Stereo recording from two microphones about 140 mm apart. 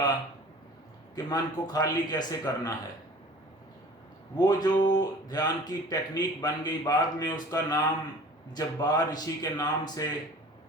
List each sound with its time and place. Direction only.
1.1 s speech: 30° left (ahead or behind)
4.4 s speech: 30° left (ahead or behind)